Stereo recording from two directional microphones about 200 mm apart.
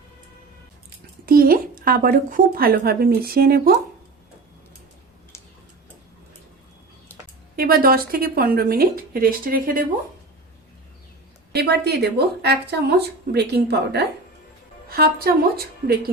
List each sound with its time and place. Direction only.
1.2 s speech: 45° right (ahead or behind)
7.5 s speech: 50° right (ahead or behind)
11.5 s speech: 55° right (ahead or behind)